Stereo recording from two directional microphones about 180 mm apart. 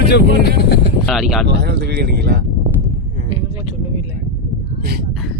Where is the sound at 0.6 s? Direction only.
65° left (ahead or behind).